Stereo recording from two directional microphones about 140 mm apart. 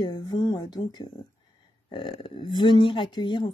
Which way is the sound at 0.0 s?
30° left (ahead or behind).